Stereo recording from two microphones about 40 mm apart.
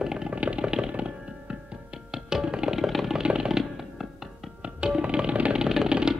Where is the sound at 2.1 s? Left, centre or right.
Centre.